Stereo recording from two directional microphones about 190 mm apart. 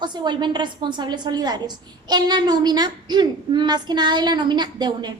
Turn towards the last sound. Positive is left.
turn(degrees=-20)  # may be behind; listen again after turning